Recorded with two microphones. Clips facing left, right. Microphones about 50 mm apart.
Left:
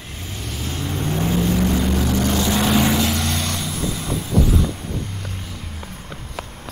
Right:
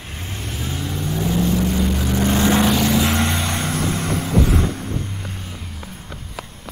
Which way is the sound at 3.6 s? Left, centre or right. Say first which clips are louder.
Right 4 dB; right.